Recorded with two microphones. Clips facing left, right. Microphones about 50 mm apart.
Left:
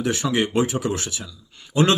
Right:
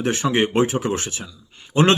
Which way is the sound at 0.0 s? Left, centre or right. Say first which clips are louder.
Right 2 dB; right.